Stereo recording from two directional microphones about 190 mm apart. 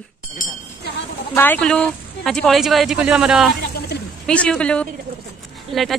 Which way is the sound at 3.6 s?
60° left (ahead or behind).